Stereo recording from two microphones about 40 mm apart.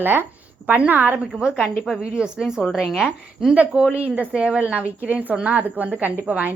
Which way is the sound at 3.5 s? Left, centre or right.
Right.